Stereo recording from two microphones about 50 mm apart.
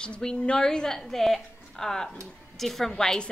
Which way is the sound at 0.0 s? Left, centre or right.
Centre.